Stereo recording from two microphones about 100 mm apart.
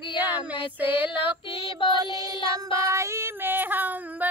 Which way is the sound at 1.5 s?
35° right (ahead or behind).